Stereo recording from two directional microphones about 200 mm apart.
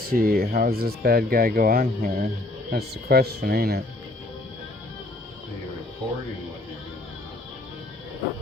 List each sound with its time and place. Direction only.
0.1 s speech: 45° right (ahead or behind)